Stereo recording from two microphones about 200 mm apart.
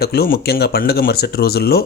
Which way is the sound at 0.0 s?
50° left (ahead or behind).